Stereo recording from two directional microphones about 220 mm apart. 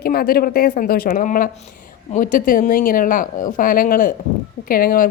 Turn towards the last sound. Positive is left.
turn(degrees=40)  # may be behind; listen again after turning